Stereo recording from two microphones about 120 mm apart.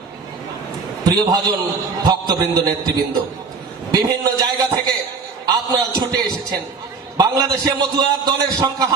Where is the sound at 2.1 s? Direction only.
35° right (ahead or behind).